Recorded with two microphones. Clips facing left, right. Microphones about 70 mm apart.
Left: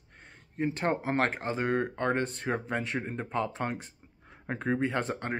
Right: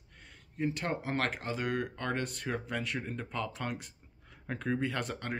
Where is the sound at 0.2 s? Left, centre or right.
Left.